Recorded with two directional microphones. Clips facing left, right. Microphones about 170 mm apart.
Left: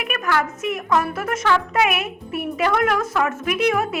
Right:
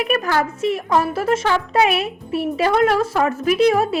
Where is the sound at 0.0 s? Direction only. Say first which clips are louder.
Right 4 dB; 35° right (ahead or behind).